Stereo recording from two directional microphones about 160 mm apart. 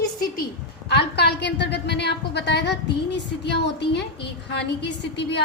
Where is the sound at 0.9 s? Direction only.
90° left.